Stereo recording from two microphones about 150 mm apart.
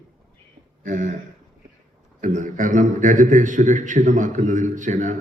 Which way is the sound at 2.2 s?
60° right (ahead or behind).